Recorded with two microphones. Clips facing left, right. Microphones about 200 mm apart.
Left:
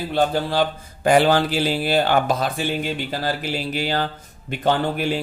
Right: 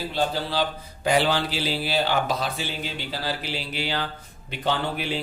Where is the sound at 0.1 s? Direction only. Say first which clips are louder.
Left 7 dB; 55° left (ahead or behind).